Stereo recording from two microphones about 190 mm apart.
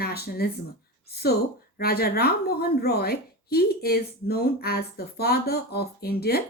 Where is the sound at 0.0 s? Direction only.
55° left (ahead or behind).